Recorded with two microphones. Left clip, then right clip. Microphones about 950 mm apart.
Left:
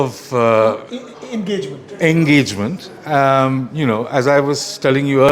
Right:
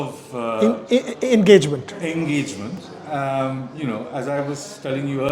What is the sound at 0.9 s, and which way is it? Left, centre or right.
Speech, right.